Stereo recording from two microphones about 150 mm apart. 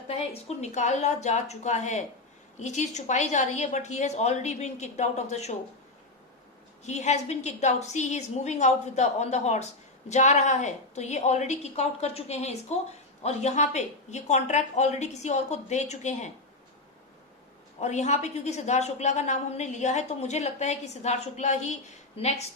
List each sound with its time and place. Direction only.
0.1 s a woman's voice: 45° left (ahead or behind)
6.8 s a woman's voice: 50° left (ahead or behind)
17.7 s a woman's voice: 50° left (ahead or behind)